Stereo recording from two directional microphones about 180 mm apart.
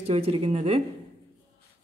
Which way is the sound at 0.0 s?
35° right (ahead or behind).